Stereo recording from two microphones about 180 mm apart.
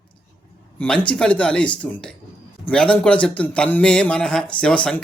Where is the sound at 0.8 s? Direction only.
5° left (ahead or behind).